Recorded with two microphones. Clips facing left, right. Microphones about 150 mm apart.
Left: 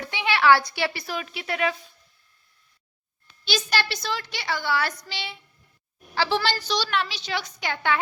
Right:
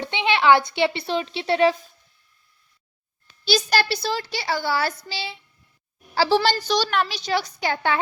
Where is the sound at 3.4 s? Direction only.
40° right (ahead or behind).